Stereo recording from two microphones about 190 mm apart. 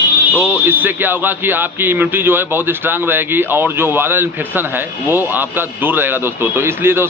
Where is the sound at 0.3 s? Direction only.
10° right (ahead or behind).